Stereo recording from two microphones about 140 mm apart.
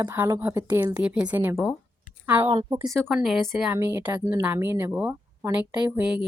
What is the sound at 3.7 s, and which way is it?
Speech, 15° right (ahead or behind).